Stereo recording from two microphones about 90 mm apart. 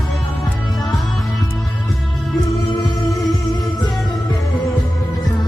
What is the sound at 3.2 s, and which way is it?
Music, centre (ahead or behind).